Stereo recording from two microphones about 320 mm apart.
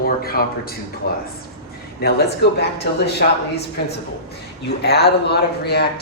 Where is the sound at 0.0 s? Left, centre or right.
Left.